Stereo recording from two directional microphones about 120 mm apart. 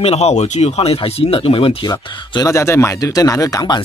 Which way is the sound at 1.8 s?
35° left (ahead or behind).